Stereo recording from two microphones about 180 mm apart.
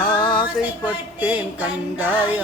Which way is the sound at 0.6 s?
10° right (ahead or behind).